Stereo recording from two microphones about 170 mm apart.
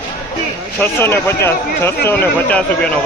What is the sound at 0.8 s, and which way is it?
Speech, 15° left (ahead or behind).